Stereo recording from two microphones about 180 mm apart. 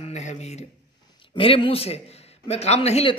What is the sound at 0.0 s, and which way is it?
A man's voice, 40° left (ahead or behind).